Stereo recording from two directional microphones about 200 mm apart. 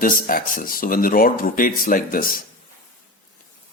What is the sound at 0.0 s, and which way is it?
Speech, 45° left (ahead or behind).